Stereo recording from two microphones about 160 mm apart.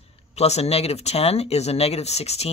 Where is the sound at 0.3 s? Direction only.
40° left (ahead or behind).